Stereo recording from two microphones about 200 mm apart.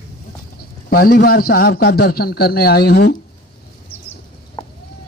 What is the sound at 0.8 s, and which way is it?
A man's voice, 50° left (ahead or behind).